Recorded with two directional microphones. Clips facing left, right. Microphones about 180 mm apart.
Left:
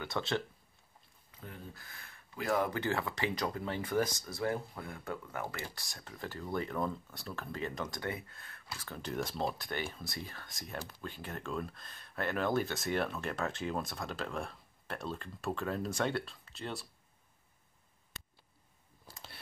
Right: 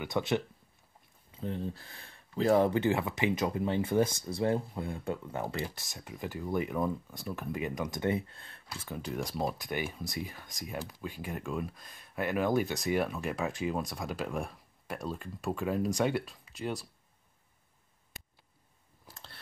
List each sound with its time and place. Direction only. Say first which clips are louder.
0.0 s speech: right 5 dB; 15° right (ahead or behind)
8.8 s speech: right 2 dB; 10° right (ahead or behind)